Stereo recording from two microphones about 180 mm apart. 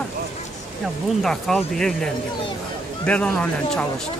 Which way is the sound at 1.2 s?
Centre (ahead or behind).